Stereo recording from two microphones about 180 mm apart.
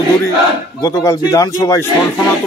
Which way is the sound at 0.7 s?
20° left (ahead or behind).